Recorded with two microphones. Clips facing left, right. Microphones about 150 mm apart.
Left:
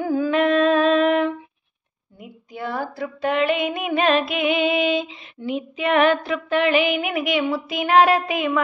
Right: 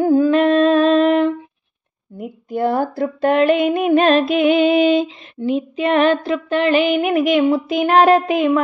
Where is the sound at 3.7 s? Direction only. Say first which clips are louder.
Right 7 dB; 35° right (ahead or behind).